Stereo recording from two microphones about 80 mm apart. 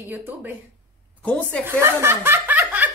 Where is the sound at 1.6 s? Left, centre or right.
Right.